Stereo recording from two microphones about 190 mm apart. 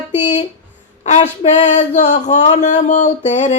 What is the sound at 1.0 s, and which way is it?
Speech, 35° left (ahead or behind).